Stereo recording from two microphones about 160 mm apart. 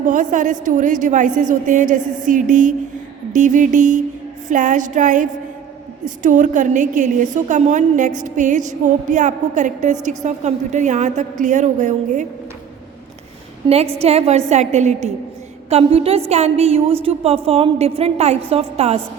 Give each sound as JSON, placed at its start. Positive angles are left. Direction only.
{"t": 0.0, "sound": "a woman's voice", "side_deg": -55}
{"t": 13.6, "sound": "a woman's voice", "side_deg": -30}
{"t": 14.0, "sound": "a woman's voice", "side_deg": -40}